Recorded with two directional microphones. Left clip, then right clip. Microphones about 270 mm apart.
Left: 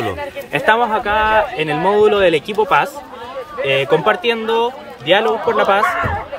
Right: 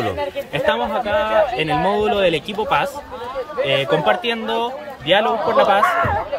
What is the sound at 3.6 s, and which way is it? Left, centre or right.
Speech, right.